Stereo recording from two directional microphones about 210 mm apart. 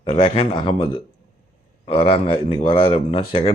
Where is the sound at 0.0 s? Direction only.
25° left (ahead or behind).